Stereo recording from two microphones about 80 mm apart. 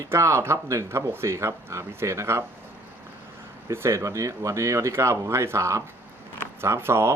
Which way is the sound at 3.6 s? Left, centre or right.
Right.